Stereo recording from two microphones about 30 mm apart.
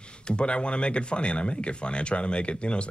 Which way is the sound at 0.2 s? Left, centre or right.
Left.